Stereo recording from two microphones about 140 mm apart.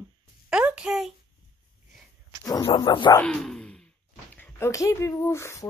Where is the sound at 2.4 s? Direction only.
30° left (ahead or behind).